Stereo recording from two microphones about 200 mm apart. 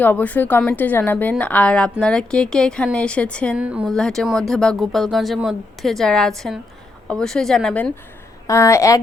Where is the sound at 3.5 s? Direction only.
5° right (ahead or behind).